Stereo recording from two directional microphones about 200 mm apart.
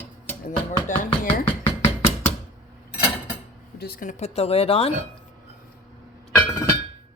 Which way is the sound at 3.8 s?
50° left (ahead or behind).